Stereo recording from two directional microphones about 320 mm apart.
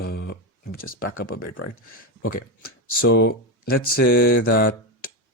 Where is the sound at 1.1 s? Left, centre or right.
Left.